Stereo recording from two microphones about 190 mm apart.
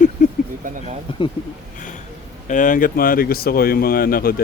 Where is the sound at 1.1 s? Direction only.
25° left (ahead or behind).